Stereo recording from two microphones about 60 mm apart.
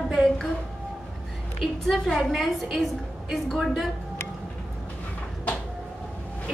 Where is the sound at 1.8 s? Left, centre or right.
Centre.